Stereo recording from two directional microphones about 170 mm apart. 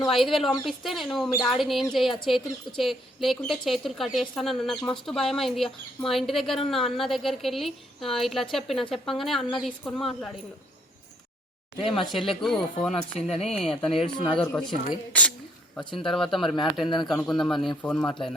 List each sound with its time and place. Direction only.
0.1 s a woman's voice: centre (ahead or behind)
11.9 s a woman's voice: centre (ahead or behind)
13.2 s speech: 40° left (ahead or behind)
13.8 s a woman's voice: centre (ahead or behind)